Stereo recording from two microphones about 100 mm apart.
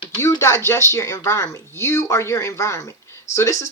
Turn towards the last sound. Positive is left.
turn(degrees=30)  # may be behind; listen again after turning